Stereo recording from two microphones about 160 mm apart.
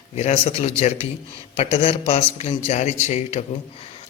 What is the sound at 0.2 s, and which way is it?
Speech, 40° left (ahead or behind).